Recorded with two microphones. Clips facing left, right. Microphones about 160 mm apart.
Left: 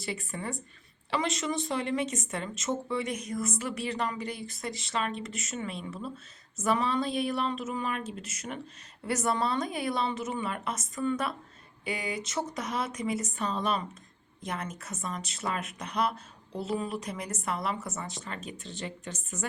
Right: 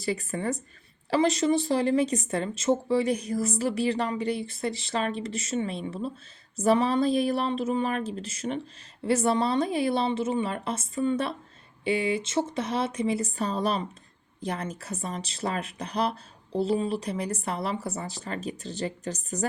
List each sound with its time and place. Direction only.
0.0 s a woman's voice: 40° right (ahead or behind)